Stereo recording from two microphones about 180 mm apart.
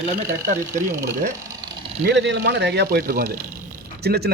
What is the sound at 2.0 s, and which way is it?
A man's voice, 75° right (ahead or behind).